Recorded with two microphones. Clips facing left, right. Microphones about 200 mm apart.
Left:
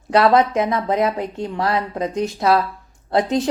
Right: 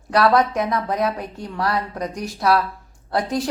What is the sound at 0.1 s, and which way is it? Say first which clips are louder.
Speech: left 2 dB; 25° left (ahead or behind).